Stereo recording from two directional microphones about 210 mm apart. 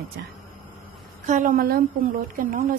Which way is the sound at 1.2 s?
40° right (ahead or behind).